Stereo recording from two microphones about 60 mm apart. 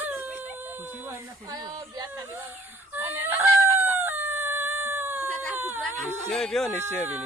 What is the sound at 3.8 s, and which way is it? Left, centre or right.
Chicken, right.